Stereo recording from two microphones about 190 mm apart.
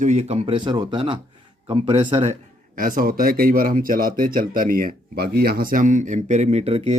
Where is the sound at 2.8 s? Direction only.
45° right (ahead or behind).